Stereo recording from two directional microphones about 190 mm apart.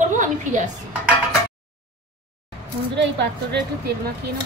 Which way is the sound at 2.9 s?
65° right (ahead or behind).